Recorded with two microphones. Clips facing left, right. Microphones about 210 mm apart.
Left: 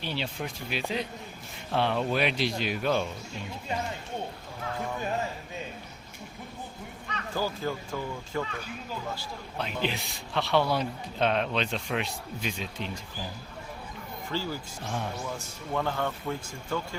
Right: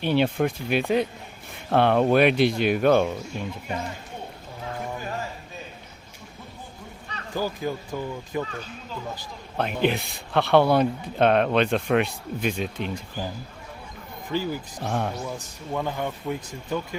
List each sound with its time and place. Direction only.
0.0 s a man's voice: 55° right (ahead or behind)
7.3 s speech: 15° right (ahead or behind)
9.6 s a man's voice: 55° right (ahead or behind)
14.3 s speech: 15° right (ahead or behind)
14.8 s a man's voice: 60° right (ahead or behind)
15.3 s speech: 15° right (ahead or behind)